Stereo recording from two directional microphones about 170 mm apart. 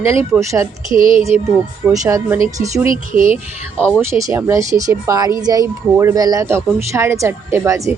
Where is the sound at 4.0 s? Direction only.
15° right (ahead or behind).